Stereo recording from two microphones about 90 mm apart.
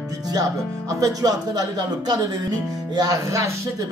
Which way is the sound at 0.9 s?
40° right (ahead or behind).